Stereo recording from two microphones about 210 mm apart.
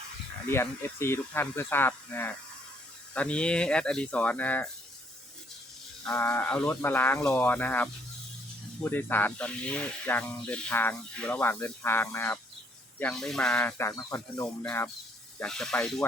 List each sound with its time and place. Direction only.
0.5 s speech: 10° left (ahead or behind)
6.1 s speech: 10° left (ahead or behind)